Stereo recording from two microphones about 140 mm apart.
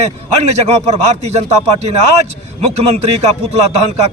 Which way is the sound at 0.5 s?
50° right (ahead or behind).